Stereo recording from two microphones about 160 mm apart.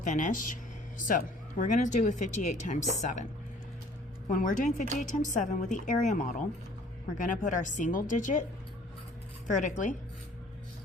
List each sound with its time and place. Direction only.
0.0 s speech: 55° left (ahead or behind)
4.3 s speech: 55° left (ahead or behind)
9.5 s speech: 50° left (ahead or behind)